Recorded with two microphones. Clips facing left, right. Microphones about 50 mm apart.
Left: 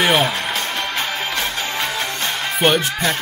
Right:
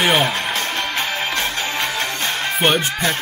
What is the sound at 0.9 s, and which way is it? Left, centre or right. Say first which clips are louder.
Music: right 1 dB; right.